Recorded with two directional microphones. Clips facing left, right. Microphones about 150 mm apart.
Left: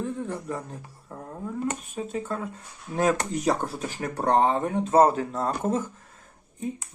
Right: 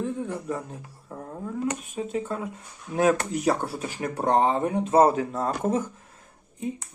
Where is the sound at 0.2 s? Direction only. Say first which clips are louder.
Right 1 dB; 10° right (ahead or behind).